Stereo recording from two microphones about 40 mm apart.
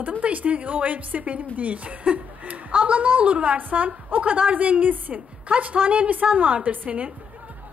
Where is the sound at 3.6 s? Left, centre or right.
Right.